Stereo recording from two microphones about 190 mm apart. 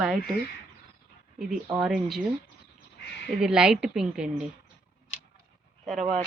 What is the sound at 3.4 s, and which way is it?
Speech, 5° right (ahead or behind).